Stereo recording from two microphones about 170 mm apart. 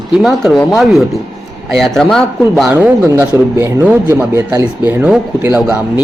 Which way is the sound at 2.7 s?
10° right (ahead or behind).